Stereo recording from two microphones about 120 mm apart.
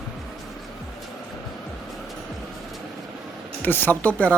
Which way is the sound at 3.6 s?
15° left (ahead or behind).